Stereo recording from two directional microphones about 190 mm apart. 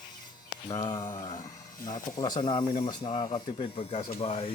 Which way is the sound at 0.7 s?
25° left (ahead or behind).